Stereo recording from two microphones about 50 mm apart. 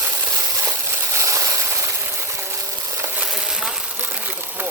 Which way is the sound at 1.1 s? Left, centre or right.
Right.